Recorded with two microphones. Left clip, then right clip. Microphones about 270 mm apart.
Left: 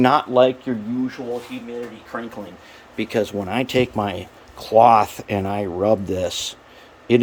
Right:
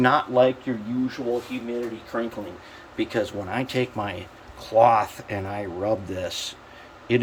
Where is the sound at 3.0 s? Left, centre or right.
Left.